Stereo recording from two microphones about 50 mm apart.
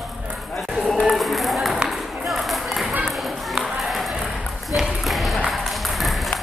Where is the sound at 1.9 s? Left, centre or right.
Centre.